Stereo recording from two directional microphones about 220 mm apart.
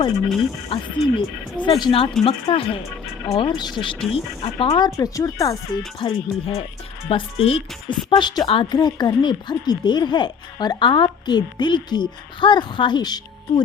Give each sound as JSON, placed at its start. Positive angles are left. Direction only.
{"t": 0.7, "sound": "a woman's voice", "side_deg": 20}